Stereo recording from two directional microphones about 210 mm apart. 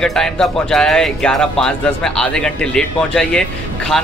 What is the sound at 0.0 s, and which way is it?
Speech, centre (ahead or behind).